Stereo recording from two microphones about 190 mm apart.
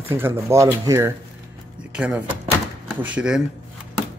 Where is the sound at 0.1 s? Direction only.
15° right (ahead or behind).